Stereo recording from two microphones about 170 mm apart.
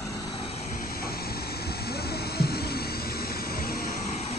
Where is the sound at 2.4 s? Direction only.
65° left (ahead or behind).